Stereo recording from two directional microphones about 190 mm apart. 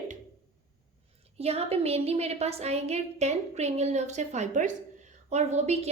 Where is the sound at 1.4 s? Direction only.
30° right (ahead or behind).